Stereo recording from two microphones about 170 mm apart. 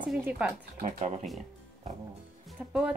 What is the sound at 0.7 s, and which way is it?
Speech, 45° right (ahead or behind).